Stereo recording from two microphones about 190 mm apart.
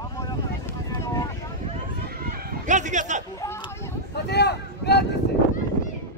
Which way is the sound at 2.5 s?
40° right (ahead or behind).